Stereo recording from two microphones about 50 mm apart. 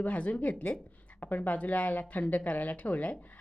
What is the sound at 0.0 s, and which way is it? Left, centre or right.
Speech, left.